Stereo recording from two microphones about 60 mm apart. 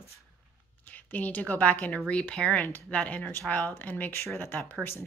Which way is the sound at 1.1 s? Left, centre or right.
Left.